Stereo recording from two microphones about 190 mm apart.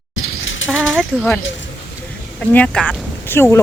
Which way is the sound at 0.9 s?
5° left (ahead or behind).